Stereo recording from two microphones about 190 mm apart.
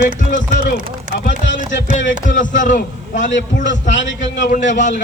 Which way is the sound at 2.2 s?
40° left (ahead or behind).